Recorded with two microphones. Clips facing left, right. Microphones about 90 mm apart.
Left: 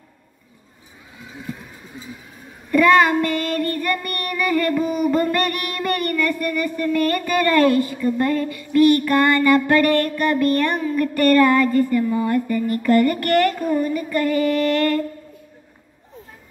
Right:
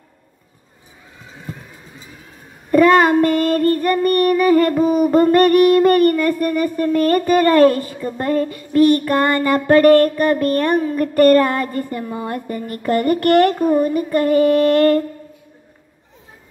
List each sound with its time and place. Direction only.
2.7 s child singing: 40° right (ahead or behind)
11.4 s a sound: 55° right (ahead or behind)
11.9 s child singing: 50° right (ahead or behind)